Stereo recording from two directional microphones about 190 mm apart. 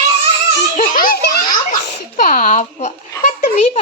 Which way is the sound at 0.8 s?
50° left (ahead or behind).